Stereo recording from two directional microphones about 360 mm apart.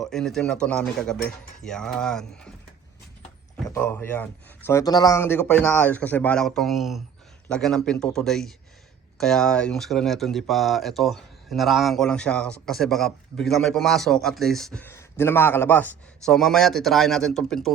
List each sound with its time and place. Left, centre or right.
0.0 s speech: centre
3.7 s speech: centre